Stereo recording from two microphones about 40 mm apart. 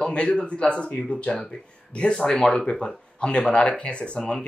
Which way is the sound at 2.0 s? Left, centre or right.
Centre.